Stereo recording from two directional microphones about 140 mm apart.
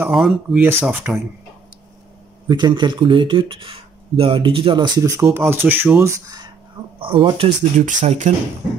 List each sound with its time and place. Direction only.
0.0 s speech: centre (ahead or behind)
0.6 s speech: 15° right (ahead or behind)
0.8 s speech: 5° right (ahead or behind)
2.4 s speech: 30° right (ahead or behind)
7.0 s speech: 40° right (ahead or behind)
7.8 s speech: 60° right (ahead or behind)